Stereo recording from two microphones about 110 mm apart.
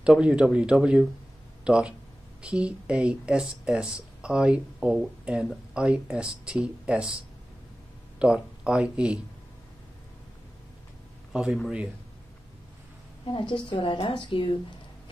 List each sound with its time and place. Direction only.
0.0 s speech: 10° right (ahead or behind)
8.2 s speech: 10° right (ahead or behind)
11.3 s speech: centre (ahead or behind)
13.3 s a woman's voice: 45° left (ahead or behind)